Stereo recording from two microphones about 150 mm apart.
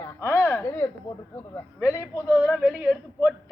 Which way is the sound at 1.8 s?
20° left (ahead or behind).